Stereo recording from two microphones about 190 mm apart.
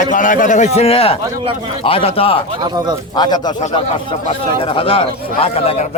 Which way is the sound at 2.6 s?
20° right (ahead or behind).